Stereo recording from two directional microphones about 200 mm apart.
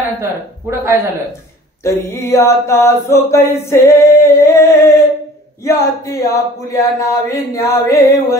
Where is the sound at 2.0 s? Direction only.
15° left (ahead or behind).